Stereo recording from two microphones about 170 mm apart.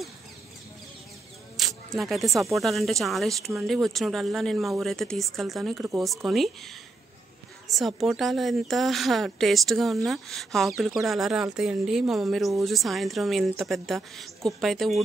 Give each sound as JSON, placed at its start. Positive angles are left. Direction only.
{"t": 1.6, "sound": "a sound", "side_deg": 0}
{"t": 2.5, "sound": "a woman's voice", "side_deg": 0}
{"t": 7.6, "sound": "a woman's voice", "side_deg": 0}